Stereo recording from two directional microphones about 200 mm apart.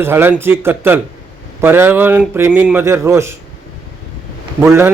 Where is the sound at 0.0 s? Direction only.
10° right (ahead or behind).